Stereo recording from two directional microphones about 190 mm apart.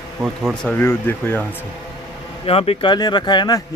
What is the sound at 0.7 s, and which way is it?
Speech, 10° left (ahead or behind).